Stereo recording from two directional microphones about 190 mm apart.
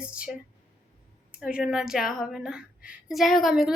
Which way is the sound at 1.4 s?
5° right (ahead or behind).